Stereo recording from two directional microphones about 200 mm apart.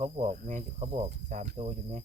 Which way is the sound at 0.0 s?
40° right (ahead or behind).